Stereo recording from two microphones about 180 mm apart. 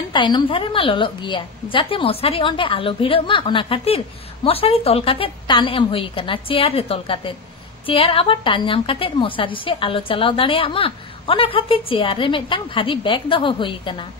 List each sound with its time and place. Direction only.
0.1 s a woman's voice: 25° left (ahead or behind)